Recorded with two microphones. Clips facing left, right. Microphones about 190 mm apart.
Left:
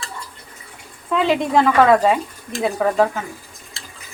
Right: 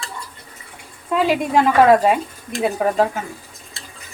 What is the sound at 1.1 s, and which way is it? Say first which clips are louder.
Speech: even; 10° right (ahead or behind).